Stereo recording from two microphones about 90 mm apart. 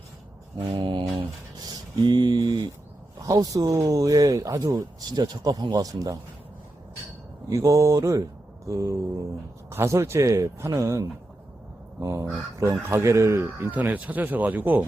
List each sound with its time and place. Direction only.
0.6 s mantra: 65° right (ahead or behind)
1.6 s a sound: 55° right (ahead or behind)
3.2 s speech: 40° right (ahead or behind)
7.5 s speech: 40° right (ahead or behind); by 14.8 s 20° right (ahead or behind)